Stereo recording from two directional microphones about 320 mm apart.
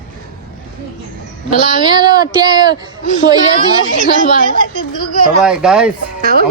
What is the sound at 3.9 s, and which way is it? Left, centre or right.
Speech, left.